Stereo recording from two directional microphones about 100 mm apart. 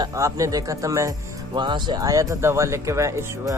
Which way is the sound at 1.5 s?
50° right (ahead or behind).